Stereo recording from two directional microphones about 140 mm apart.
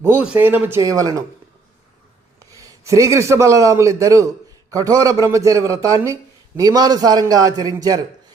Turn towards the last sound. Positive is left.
turn(degrees=-25)  # may be behind; listen again after turning